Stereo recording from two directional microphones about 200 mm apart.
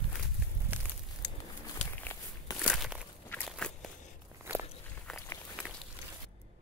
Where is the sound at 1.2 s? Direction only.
60° left (ahead or behind).